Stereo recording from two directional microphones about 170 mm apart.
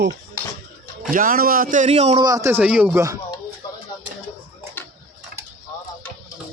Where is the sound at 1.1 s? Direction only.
55° right (ahead or behind); by 2.2 s 40° right (ahead or behind).